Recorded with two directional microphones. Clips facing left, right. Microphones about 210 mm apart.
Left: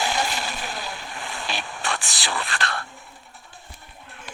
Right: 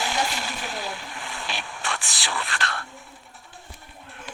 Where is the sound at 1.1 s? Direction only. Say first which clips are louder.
Left 2 dB; 35° left (ahead or behind).